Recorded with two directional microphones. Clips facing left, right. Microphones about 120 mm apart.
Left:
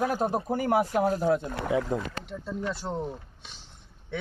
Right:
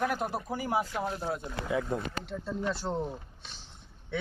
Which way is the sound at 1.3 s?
65° left (ahead or behind).